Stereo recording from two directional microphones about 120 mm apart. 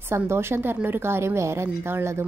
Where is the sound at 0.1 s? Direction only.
20° right (ahead or behind).